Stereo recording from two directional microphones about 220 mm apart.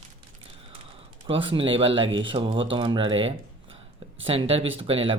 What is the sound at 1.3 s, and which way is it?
Speech, 25° right (ahead or behind).